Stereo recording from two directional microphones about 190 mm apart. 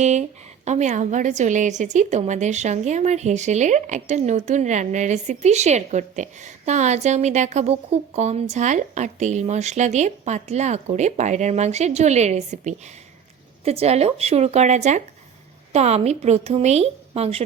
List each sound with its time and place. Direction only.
0.0 s a woman's voice: 35° right (ahead or behind)